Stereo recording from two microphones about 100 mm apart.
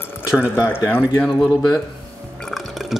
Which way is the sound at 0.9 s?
15° left (ahead or behind).